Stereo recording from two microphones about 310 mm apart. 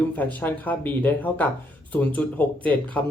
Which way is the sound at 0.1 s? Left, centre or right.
Centre.